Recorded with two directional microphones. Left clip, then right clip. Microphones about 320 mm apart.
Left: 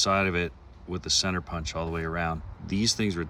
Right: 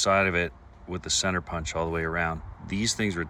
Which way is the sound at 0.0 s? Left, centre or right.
Centre.